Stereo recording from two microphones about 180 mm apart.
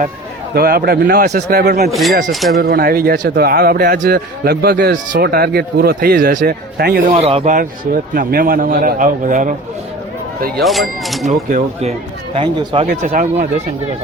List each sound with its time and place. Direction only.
0.5 s a man's voice: 55° right (ahead or behind)
1.9 s speech: centre (ahead or behind)
2.6 s a man's voice: 55° right (ahead or behind)
7.2 s speech: 35° right (ahead or behind)
8.1 s a man's voice: 50° right (ahead or behind)
10.6 s speech: centre (ahead or behind)
11.3 s speech: 45° right (ahead or behind)
12.9 s a man's voice: 50° right (ahead or behind)